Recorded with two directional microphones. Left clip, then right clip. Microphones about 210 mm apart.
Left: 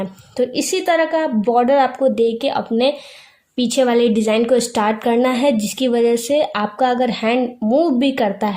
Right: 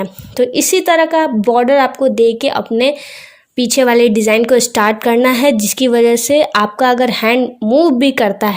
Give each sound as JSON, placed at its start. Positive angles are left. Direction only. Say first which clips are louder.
{"t": 0.0, "sound": "a woman's voice", "louder": "right 5 dB", "side_deg": -30}